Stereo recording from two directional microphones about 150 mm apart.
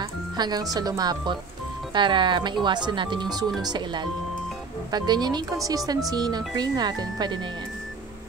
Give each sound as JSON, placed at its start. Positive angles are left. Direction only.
{"t": 0.0, "sound": "speech", "side_deg": -25}